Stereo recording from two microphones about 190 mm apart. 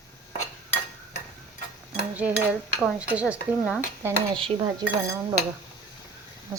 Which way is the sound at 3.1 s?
5° right (ahead or behind).